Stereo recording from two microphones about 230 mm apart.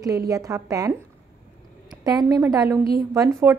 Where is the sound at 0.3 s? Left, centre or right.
Centre.